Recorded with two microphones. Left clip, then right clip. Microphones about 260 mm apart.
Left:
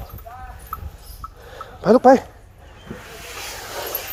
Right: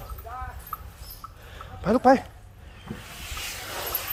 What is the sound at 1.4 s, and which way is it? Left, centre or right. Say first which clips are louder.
Dog: left 9 dB; left.